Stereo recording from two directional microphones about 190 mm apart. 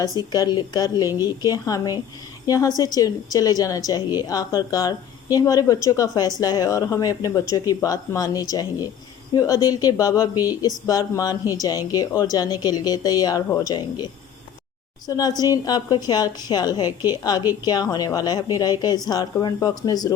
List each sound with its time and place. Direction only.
0.3 s a woman's voice: 20° left (ahead or behind)
15.0 s a woman's voice: 20° left (ahead or behind)